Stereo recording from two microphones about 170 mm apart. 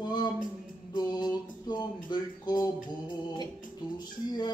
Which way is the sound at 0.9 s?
25° left (ahead or behind).